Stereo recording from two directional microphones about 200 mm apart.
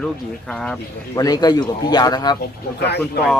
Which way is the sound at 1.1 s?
20° left (ahead or behind).